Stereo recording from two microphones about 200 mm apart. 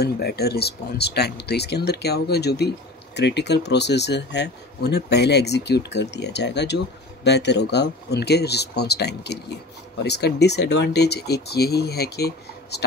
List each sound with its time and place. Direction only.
0.0 s speech: 50° left (ahead or behind)